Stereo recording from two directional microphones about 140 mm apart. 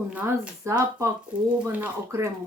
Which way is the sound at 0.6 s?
20° right (ahead or behind).